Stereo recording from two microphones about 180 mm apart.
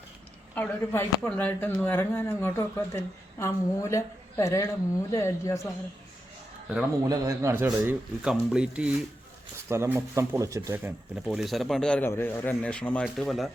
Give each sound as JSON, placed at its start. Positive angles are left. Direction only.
{"t": 0.5, "sound": "speech", "side_deg": 10}
{"t": 7.0, "sound": "a man's voice", "side_deg": -15}